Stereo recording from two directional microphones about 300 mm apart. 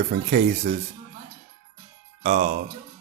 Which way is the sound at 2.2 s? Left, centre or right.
Right.